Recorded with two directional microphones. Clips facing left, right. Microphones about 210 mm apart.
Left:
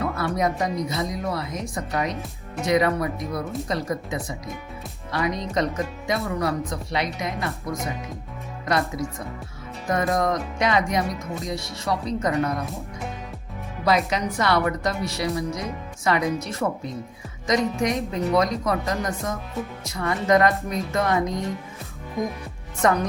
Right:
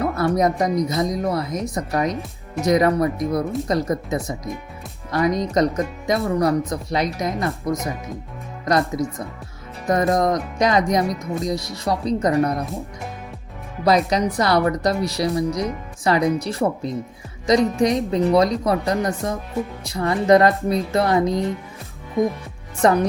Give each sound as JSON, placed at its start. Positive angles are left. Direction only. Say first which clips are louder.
{"t": 0.0, "sound": "speech", "louder": "right 5 dB", "side_deg": -40}
{"t": 13.8, "sound": "speech", "louder": "right 4 dB", "side_deg": -35}
{"t": 22.8, "sound": "speech", "louder": "right 4 dB", "side_deg": -35}